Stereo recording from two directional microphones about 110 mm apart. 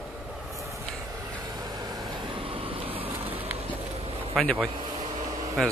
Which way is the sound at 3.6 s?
60° right (ahead or behind).